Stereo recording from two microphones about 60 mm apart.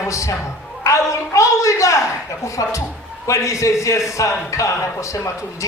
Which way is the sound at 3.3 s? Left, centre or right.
Left.